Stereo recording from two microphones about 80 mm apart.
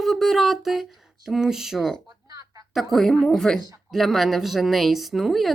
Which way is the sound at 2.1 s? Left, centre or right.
Right.